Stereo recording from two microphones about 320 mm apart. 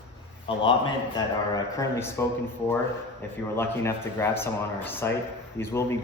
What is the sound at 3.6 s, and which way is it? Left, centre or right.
A man's voice, centre.